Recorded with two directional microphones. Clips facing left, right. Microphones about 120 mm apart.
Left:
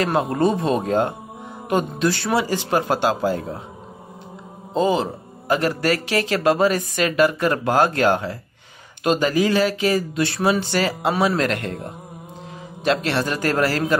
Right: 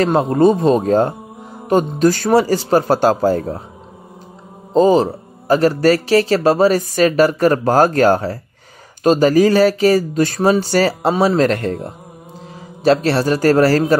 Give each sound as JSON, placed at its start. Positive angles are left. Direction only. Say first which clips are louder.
{"t": 0.0, "sound": "speech", "louder": "right 6 dB", "side_deg": -30}
{"t": 4.7, "sound": "speech", "louder": "right 8 dB", "side_deg": -35}